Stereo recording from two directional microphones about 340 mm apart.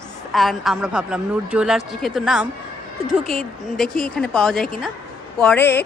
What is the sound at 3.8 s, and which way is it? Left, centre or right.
A woman's voice, centre.